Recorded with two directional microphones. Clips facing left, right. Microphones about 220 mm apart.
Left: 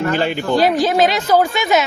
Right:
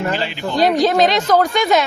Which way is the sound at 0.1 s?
50° left (ahead or behind).